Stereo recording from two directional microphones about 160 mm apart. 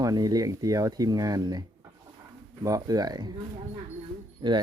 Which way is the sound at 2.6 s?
20° right (ahead or behind).